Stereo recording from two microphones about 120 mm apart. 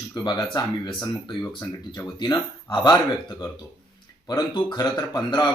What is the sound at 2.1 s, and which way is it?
Speech, 35° left (ahead or behind).